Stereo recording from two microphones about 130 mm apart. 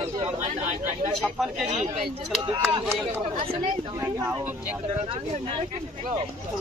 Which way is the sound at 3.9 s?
20° right (ahead or behind).